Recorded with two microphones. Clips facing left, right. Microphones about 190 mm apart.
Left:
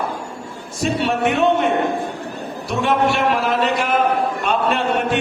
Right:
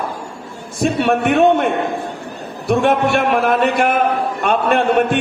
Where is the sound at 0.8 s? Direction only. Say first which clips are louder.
Right 3 dB; 55° right (ahead or behind).